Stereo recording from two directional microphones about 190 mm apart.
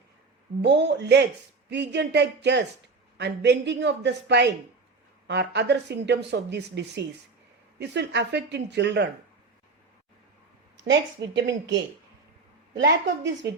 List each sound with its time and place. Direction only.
0.6 s speech: 65° right (ahead or behind)
10.8 s speech: 65° right (ahead or behind)
12.7 s speech: 60° right (ahead or behind)